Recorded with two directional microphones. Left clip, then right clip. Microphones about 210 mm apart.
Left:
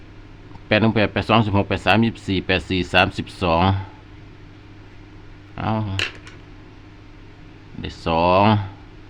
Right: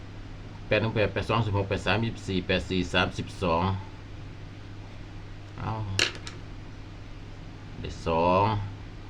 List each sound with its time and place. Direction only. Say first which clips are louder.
0.7 s speech: left 7 dB; 50° left (ahead or behind)
5.5 s speech: left 11 dB; 45° left (ahead or behind)
7.8 s speech: left 6 dB; 45° left (ahead or behind)